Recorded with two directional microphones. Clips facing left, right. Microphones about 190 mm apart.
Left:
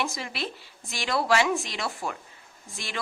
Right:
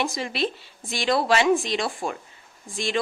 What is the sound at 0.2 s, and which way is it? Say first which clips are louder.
A woman's voice: right 7 dB; 25° right (ahead or behind).